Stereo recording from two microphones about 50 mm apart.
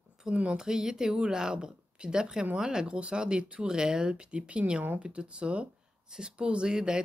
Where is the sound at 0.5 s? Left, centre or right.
Centre.